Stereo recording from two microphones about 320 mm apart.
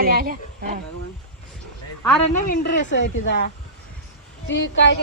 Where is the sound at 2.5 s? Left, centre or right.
Left.